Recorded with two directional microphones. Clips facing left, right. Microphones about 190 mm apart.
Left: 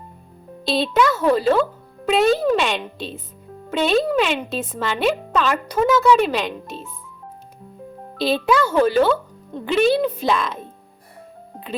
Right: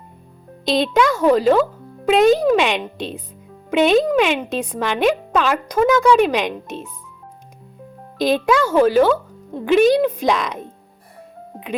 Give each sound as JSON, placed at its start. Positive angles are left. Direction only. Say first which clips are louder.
{"t": 0.6, "sound": "speech", "louder": "right 2 dB", "side_deg": -15}
{"t": 8.2, "sound": "speech", "louder": "right 2 dB", "side_deg": -10}